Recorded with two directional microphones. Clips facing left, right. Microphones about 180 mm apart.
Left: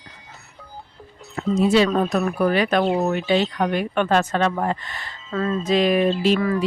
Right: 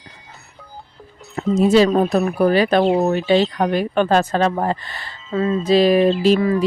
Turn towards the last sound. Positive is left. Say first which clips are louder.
# right 4 dB
turn(degrees=-35)  # may be behind; listen again after turning